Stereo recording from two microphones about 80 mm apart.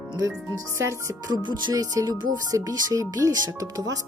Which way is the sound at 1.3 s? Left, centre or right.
Right.